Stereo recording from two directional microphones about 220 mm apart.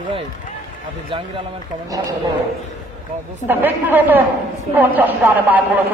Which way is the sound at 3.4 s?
10° right (ahead or behind).